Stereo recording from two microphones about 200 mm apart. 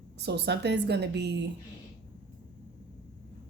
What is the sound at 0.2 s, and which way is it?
Speech, 55° right (ahead or behind).